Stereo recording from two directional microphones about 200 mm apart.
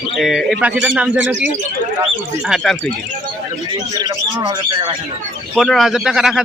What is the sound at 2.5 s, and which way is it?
Speech, centre (ahead or behind).